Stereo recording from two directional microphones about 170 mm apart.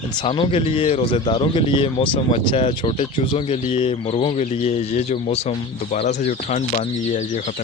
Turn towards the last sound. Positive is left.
turn(degrees=45)  # may be behind; listen again after turning